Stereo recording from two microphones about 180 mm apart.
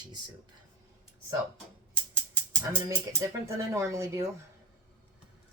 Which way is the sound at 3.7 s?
15° right (ahead or behind).